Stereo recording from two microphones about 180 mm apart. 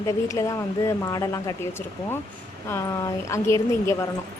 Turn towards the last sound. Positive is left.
turn(degrees=15)  # may be behind; listen again after turning